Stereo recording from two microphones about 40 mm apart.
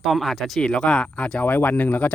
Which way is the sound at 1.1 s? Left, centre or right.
Left.